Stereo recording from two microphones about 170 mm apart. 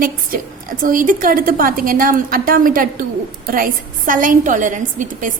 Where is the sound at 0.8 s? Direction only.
55° right (ahead or behind).